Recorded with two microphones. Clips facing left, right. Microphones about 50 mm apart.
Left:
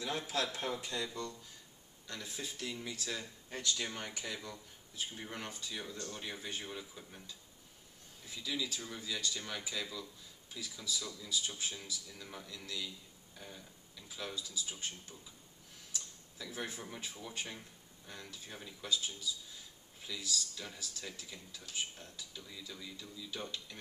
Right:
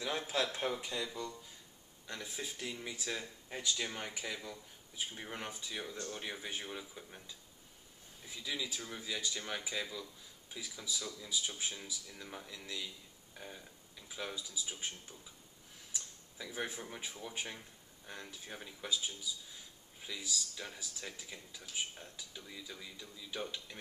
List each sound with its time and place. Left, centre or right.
0.0 s speech: right
8.4 s speech: centre
15.9 s tick-tock: centre
16.9 s speech: centre